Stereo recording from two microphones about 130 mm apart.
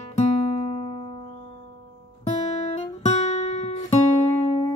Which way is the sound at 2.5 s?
55° left (ahead or behind).